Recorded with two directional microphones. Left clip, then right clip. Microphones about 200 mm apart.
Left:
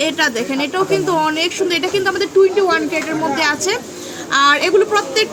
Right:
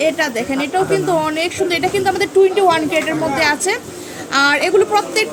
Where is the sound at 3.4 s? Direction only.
5° left (ahead or behind).